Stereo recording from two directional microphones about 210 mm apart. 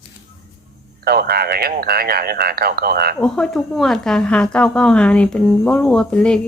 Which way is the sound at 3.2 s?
5° left (ahead or behind).